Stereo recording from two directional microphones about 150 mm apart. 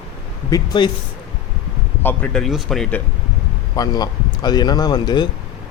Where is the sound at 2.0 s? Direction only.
10° left (ahead or behind).